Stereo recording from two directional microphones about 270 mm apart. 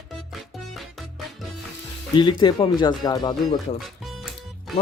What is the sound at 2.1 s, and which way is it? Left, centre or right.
Speech, centre.